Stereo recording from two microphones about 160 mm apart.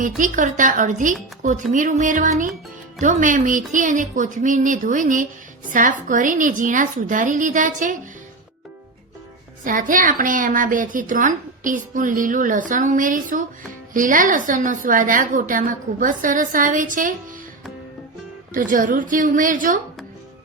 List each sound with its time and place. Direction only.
0.2 s a woman's voice: 55° right (ahead or behind)
9.6 s a woman's voice: 55° right (ahead or behind)
18.5 s a woman's voice: 55° right (ahead or behind)